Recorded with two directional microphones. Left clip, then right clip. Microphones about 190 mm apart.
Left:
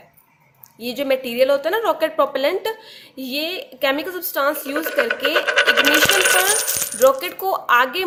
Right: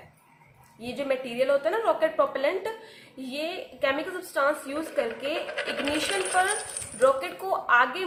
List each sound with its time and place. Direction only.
0.8 s a woman's voice: 50° left (ahead or behind)